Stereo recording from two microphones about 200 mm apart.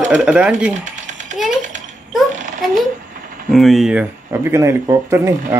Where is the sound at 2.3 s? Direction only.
40° right (ahead or behind).